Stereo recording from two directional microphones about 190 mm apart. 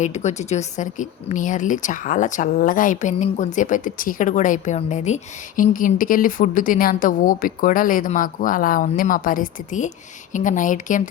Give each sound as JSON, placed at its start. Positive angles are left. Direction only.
{"t": 0.0, "sound": "speech", "side_deg": 40}